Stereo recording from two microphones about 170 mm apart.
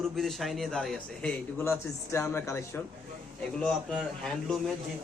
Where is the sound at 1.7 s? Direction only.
15° left (ahead or behind).